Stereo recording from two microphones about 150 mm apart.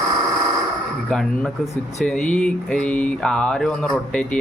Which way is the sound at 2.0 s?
10° left (ahead or behind).